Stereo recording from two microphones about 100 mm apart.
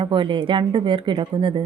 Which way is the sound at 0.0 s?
55° right (ahead or behind).